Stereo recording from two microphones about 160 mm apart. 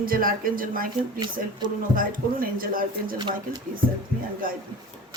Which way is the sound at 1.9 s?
60° right (ahead or behind).